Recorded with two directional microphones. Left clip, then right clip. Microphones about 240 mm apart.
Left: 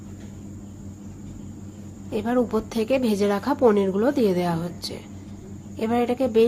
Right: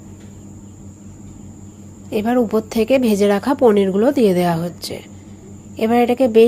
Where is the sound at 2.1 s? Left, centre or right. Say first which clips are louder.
Right 6 dB; centre.